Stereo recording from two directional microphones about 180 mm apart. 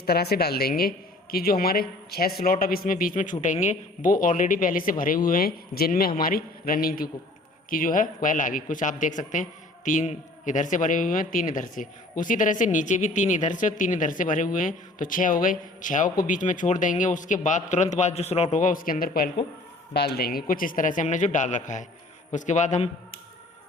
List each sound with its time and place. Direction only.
0.0 s a woman's voice: 65° left (ahead or behind); by 22.9 s 40° left (ahead or behind)